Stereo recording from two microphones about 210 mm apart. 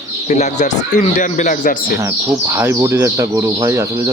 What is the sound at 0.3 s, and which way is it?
A man's voice, 35° left (ahead or behind).